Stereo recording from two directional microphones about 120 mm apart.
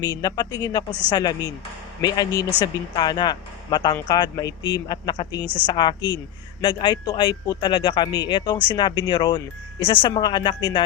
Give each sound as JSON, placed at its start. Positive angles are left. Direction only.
{"t": 0.0, "sound": "speech", "side_deg": 35}